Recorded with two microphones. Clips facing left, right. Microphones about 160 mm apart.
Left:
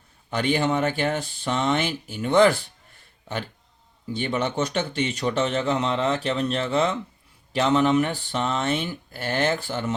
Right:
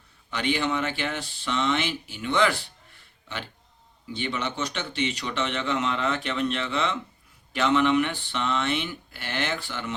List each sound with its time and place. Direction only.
0.3 s speech: 45° left (ahead or behind)
4.1 s speech: 45° left (ahead or behind)